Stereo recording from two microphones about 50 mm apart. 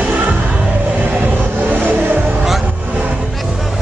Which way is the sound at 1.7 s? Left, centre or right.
Right.